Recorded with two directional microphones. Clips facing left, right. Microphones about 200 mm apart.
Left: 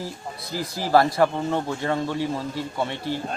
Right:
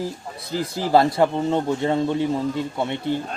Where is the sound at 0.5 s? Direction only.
20° right (ahead or behind).